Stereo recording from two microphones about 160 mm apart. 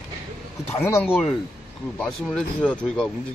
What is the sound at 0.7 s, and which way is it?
Speech, 15° left (ahead or behind).